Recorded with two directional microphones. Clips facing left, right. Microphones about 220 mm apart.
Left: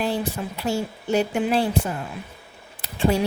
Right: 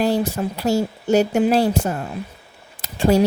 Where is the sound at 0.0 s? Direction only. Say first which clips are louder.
Right 6 dB; 40° right (ahead or behind).